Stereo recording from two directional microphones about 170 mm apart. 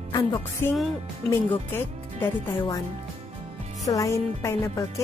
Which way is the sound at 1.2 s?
10° left (ahead or behind).